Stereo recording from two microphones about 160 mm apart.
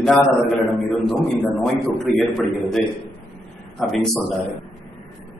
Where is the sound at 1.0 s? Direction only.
5° left (ahead or behind).